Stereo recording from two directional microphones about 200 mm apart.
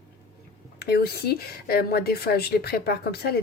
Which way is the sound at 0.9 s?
50° left (ahead or behind).